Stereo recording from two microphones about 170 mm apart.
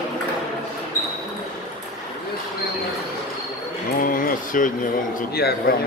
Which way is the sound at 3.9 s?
55° left (ahead or behind).